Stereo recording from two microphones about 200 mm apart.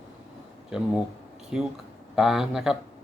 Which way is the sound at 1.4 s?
Centre (ahead or behind).